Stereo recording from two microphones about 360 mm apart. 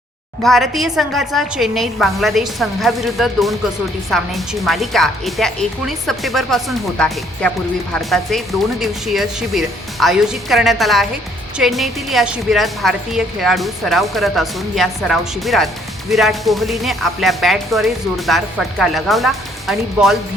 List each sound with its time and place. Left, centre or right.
0.4 s a woman's voice: centre